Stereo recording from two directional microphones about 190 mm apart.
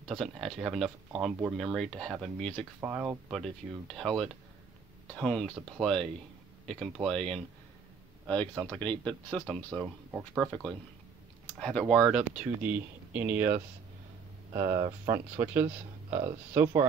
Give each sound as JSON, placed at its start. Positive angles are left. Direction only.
{"t": 0.1, "sound": "speech", "side_deg": 0}
{"t": 2.8, "sound": "speech", "side_deg": -10}
{"t": 10.1, "sound": "speech", "side_deg": -5}
{"t": 11.4, "sound": "speech", "side_deg": 5}